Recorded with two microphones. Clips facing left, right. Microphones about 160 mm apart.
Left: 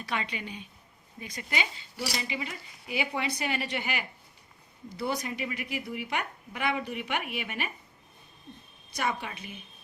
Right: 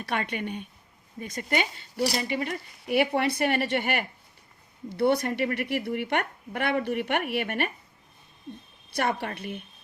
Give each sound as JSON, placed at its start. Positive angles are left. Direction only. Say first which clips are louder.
{"t": 0.0, "sound": "a woman's voice", "louder": "right 4 dB", "side_deg": -55}
{"t": 9.0, "sound": "a woman's voice", "louder": "right 4 dB", "side_deg": -60}